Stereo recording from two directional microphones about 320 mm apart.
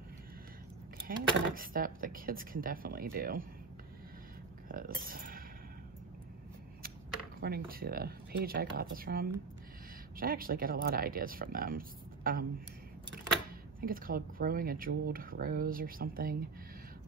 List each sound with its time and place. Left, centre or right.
1.0 s speech: right
4.6 s speech: right
7.3 s speech: right
13.7 s speech: right